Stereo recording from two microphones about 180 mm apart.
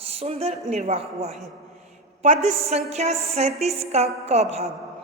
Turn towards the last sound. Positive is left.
turn(degrees=-35)  # may be behind; listen again after turning